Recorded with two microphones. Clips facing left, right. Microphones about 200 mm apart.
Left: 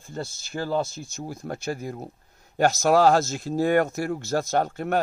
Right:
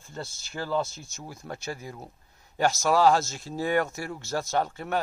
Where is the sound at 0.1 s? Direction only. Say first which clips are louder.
Left 5 dB; 35° left (ahead or behind).